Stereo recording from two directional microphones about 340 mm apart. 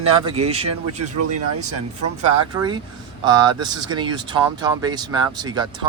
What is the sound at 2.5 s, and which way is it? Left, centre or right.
Speech, centre.